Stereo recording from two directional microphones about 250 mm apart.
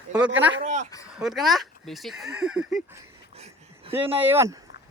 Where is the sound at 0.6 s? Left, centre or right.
Right.